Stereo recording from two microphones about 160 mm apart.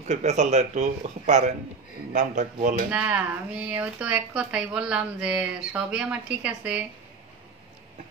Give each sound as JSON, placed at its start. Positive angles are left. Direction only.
{"t": 0.1, "sound": "speech", "side_deg": -45}
{"t": 2.9, "sound": "speech", "side_deg": -10}